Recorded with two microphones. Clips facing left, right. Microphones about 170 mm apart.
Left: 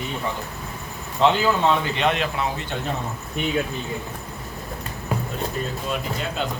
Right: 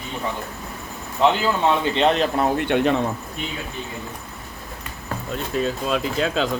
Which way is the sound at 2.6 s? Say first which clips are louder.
Right 10 dB; 70° right (ahead or behind).